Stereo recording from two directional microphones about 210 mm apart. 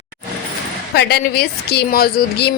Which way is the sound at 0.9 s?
50° left (ahead or behind).